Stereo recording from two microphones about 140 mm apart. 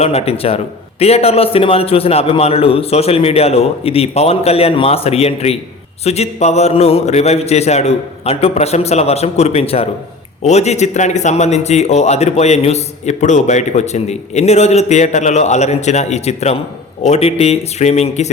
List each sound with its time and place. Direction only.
0.0 s speech: 45° left (ahead or behind)